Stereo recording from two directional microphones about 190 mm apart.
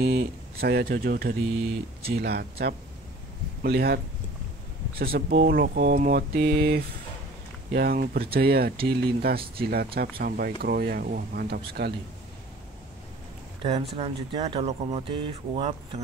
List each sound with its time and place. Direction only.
0.0 s speech: 55° right (ahead or behind)
13.6 s speech: 35° right (ahead or behind)